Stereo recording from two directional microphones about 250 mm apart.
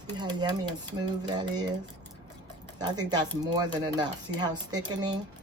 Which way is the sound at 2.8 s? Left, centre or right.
Centre.